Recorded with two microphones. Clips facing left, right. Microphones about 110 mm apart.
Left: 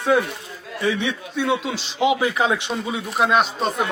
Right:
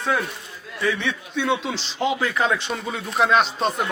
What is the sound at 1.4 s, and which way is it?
A man's voice, 5° left (ahead or behind).